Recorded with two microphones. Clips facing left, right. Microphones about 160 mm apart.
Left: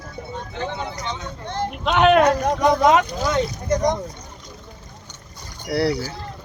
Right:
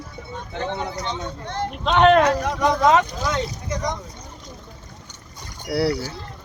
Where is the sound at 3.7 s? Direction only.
40° left (ahead or behind).